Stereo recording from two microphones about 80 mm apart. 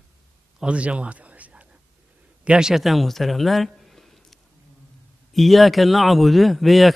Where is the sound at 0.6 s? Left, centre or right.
Centre.